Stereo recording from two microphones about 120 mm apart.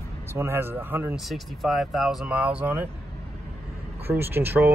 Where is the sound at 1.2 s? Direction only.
Centre (ahead or behind).